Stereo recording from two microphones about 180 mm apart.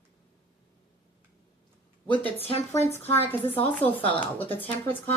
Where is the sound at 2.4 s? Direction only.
35° left (ahead or behind).